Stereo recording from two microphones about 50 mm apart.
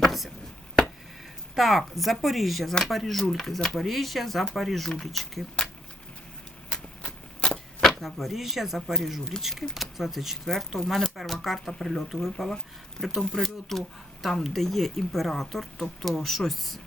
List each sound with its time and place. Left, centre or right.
0.0 s a sound: centre
1.5 s speech: centre
6.7 s vehicle: left
7.8 s speech: centre
13.0 s speech: centre